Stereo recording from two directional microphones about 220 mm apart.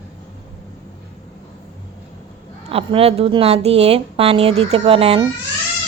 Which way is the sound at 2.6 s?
25° right (ahead or behind).